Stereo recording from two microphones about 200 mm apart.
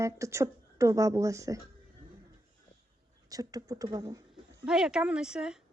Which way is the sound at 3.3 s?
20° right (ahead or behind).